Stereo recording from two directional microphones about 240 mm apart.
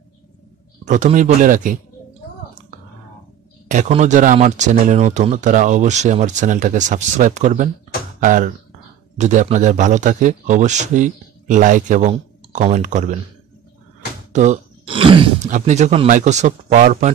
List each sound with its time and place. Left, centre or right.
0.8 s speech: right
3.6 s speech: right
14.3 s speech: right